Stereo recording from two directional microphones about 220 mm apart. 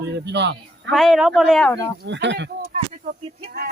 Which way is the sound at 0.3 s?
50° right (ahead or behind).